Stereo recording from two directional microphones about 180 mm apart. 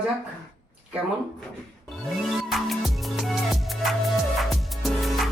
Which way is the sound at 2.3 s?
Centre (ahead or behind).